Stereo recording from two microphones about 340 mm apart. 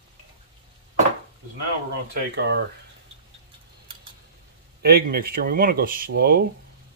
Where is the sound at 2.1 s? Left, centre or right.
Right.